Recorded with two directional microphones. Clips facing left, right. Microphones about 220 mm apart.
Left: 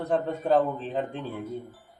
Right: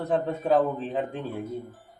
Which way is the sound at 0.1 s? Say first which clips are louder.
Even; centre (ahead or behind).